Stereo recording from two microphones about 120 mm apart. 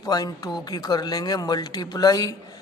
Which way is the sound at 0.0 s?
30° left (ahead or behind).